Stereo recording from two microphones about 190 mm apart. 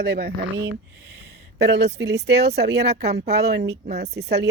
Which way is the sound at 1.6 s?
60° right (ahead or behind).